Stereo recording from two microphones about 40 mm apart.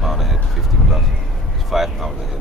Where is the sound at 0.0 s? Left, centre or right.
Centre.